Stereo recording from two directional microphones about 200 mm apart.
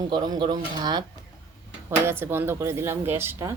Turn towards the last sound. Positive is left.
turn(degrees=-15)  # may be behind; listen again after turning